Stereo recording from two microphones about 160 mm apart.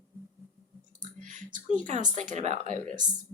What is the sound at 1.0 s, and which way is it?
Clicking, 55° right (ahead or behind).